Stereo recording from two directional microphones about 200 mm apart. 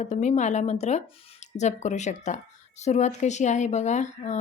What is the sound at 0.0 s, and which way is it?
Speech, 35° left (ahead or behind).